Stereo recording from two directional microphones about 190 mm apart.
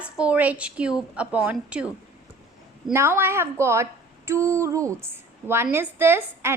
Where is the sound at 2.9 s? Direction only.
15° right (ahead or behind).